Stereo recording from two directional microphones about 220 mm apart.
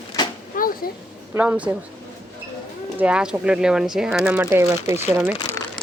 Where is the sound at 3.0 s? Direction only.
5° right (ahead or behind).